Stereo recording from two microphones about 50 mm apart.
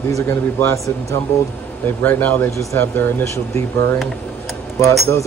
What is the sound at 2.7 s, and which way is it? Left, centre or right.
Speech, left.